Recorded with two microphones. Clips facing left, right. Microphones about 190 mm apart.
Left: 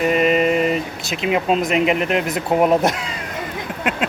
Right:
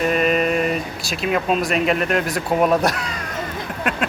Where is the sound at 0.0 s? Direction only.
20° left (ahead or behind).